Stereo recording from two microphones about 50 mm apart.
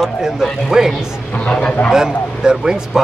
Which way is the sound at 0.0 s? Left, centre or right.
Centre.